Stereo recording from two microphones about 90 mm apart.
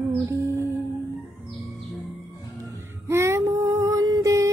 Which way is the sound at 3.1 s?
30° right (ahead or behind).